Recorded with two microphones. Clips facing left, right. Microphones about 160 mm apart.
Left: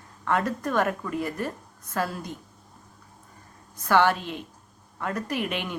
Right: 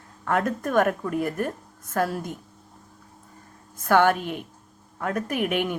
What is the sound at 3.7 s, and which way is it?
A woman's voice, 50° right (ahead or behind).